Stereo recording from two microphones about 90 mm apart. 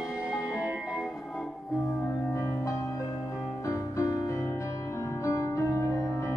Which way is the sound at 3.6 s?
35° left (ahead or behind).